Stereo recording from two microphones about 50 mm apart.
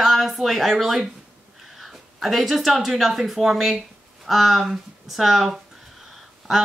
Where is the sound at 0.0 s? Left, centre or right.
Centre.